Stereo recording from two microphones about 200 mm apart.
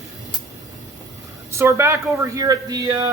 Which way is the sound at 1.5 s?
15° right (ahead or behind).